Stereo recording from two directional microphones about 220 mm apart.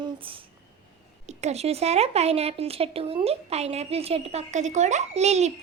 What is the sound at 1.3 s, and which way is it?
A woman's voice, 30° right (ahead or behind).